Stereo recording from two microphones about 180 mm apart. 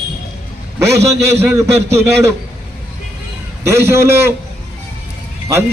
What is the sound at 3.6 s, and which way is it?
Speech, 15° right (ahead or behind).